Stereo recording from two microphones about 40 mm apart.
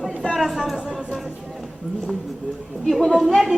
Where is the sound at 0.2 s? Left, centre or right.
Left.